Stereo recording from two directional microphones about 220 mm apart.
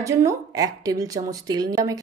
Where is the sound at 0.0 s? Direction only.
15° right (ahead or behind).